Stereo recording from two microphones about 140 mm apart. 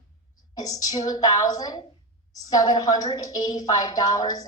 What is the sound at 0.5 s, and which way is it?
A woman's voice, 25° left (ahead or behind).